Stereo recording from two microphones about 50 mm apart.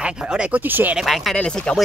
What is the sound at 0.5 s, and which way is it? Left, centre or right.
Speech, right.